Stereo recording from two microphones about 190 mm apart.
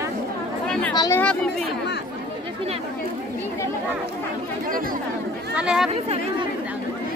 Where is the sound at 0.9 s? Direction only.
15° left (ahead or behind).